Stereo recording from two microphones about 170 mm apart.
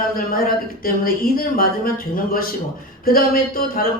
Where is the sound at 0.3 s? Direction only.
60° left (ahead or behind).